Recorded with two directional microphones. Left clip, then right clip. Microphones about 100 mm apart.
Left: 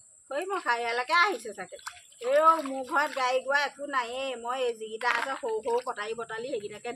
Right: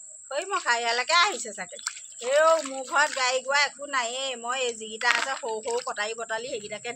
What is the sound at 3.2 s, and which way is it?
A woman's voice, 25° left (ahead or behind).